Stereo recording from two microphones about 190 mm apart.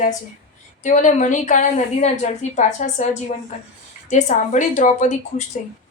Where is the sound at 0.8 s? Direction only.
40° left (ahead or behind).